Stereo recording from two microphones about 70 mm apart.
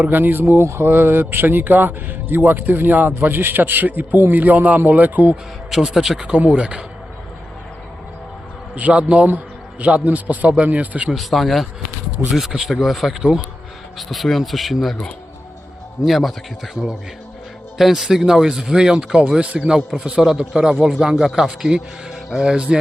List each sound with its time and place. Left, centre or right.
0.0 s speech: right
5.7 s speech: centre
8.7 s speech: centre
11.1 s speech: centre
16.0 s speech: centre
17.7 s speech: centre